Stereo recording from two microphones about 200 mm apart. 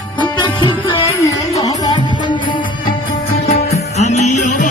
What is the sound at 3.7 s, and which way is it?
Music, 35° left (ahead or behind).